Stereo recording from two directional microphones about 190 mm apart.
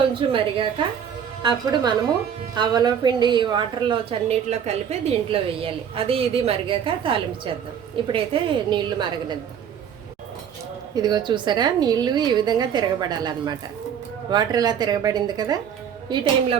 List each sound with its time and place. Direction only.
0.2 s a woman's voice: 25° right (ahead or behind)
1.4 s a woman's voice: 25° right (ahead or behind)
10.9 s a woman's voice: 20° right (ahead or behind)